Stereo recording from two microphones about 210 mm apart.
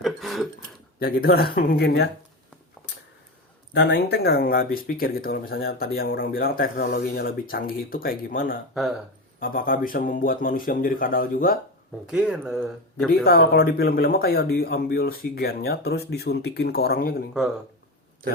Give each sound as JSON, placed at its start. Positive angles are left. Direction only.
{"t": 0.0, "sound": "a sound", "side_deg": 0}
{"t": 0.9, "sound": "speech", "side_deg": 45}
{"t": 3.8, "sound": "speech", "side_deg": 55}
{"t": 8.7, "sound": "speech", "side_deg": 0}
{"t": 9.4, "sound": "speech", "side_deg": 40}
{"t": 12.0, "sound": "speech", "side_deg": -5}
{"t": 13.2, "sound": "speech", "side_deg": 45}